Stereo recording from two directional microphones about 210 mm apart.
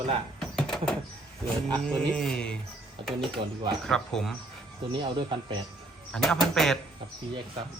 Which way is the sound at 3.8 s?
Centre (ahead or behind).